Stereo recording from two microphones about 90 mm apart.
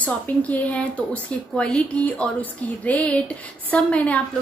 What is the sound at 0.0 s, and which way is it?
A woman's voice, 15° left (ahead or behind).